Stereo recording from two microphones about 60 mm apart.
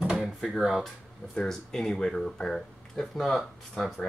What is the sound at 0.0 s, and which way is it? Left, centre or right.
Drawer open or close, centre.